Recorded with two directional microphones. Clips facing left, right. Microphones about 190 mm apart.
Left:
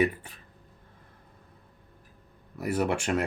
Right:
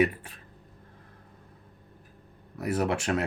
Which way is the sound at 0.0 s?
Centre (ahead or behind).